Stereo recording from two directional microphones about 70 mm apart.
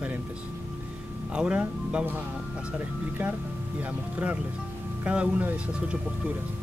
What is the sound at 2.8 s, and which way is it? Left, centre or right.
Speech, right.